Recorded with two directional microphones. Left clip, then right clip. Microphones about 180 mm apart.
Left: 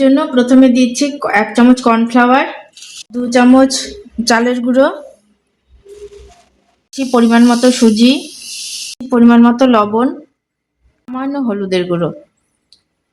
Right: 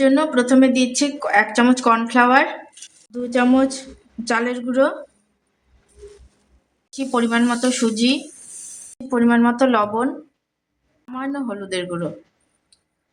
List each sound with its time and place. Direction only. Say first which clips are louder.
0.0 s speech: left 5 dB; 30° left (ahead or behind)
3.1 s a woman's voice: left 8 dB; 50° left (ahead or behind)
6.9 s speech: left 8 dB; 40° left (ahead or behind)
11.1 s speech: left 8 dB; 40° left (ahead or behind)